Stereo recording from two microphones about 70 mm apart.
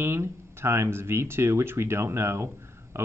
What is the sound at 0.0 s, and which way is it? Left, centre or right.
Speech, right.